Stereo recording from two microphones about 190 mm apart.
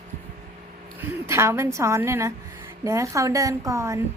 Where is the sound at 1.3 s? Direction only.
15° right (ahead or behind).